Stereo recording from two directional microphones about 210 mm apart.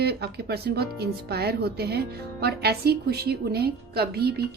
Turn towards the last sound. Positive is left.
turn(degrees=-50)  # may be behind; listen again after turning